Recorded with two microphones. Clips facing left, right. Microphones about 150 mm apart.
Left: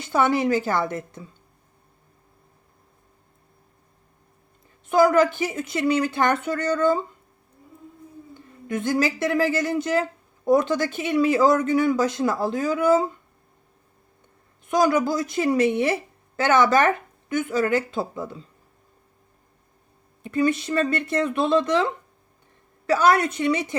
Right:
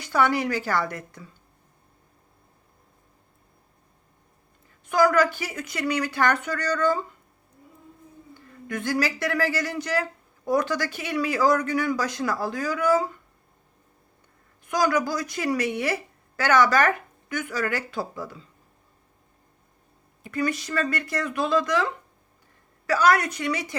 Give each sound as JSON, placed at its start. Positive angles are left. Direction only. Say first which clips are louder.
{"t": 0.0, "sound": "speech", "louder": "left 2 dB", "side_deg": 20}
{"t": 4.9, "sound": "speech", "louder": "left 3 dB", "side_deg": 25}
{"t": 8.3, "sound": "speech", "louder": "left 4 dB", "side_deg": 20}
{"t": 14.7, "sound": "speech", "louder": "left 4 dB", "side_deg": 25}
{"t": 20.2, "sound": "speech", "louder": "left 5 dB", "side_deg": 25}